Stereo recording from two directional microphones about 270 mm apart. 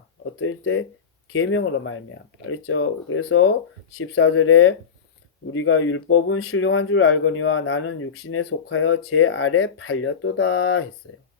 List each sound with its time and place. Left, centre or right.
0.3 s speech: left